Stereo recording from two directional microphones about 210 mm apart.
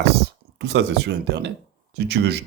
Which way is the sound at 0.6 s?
55° right (ahead or behind).